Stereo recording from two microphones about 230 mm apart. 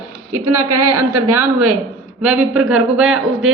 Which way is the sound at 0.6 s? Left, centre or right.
Right.